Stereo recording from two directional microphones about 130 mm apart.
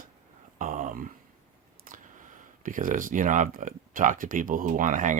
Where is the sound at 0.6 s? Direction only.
85° right.